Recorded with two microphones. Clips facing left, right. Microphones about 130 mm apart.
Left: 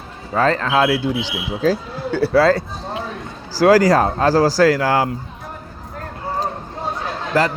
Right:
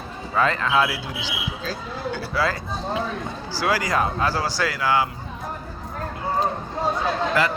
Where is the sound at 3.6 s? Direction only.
40° left (ahead or behind).